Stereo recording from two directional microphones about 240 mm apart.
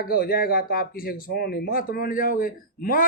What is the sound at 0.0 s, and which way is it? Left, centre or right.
Speech, left.